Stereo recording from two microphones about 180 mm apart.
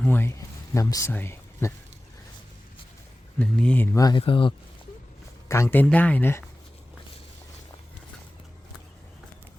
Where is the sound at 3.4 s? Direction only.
5° left (ahead or behind); by 4.5 s 30° left (ahead or behind).